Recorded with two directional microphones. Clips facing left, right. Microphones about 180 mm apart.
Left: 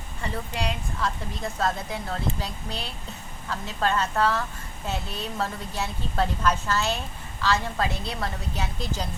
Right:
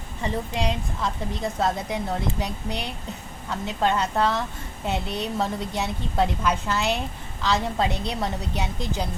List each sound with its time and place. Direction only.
0.2 s a woman's voice: 20° right (ahead or behind)